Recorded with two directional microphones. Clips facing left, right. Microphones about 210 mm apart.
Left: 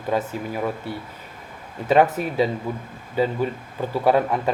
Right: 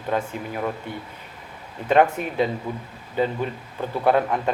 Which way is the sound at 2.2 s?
40° left (ahead or behind).